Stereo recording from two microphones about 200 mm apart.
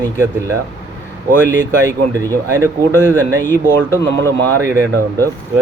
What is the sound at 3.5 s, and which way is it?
Speech, 10° left (ahead or behind).